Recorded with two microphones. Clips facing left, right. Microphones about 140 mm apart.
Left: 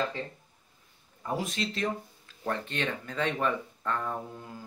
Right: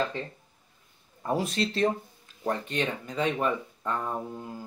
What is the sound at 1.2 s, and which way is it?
Speech, 35° right (ahead or behind).